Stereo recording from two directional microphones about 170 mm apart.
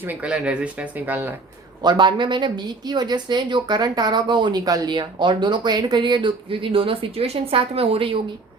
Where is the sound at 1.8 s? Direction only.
25° right (ahead or behind).